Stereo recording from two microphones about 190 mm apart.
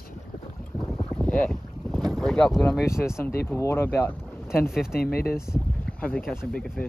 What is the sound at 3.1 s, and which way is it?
Speech, 10° left (ahead or behind).